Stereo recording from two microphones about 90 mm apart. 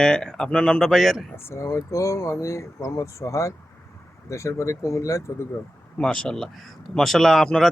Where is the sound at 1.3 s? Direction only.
30° left (ahead or behind).